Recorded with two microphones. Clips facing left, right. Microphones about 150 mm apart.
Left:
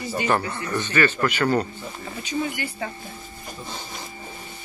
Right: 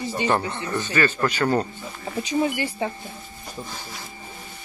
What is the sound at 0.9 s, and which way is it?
Speech, 35° right (ahead or behind).